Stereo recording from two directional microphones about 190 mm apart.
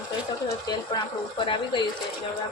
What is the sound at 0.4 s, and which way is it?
Speech, 25° left (ahead or behind).